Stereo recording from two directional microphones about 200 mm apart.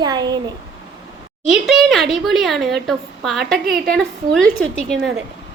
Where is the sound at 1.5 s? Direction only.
Centre (ahead or behind).